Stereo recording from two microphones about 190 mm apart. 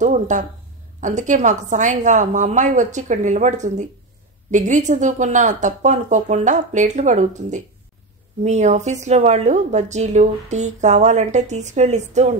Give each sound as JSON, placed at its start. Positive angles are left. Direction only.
{"t": 0.0, "sound": "speech", "side_deg": -40}